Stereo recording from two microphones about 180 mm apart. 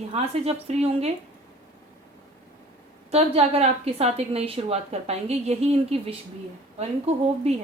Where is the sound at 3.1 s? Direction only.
35° right (ahead or behind).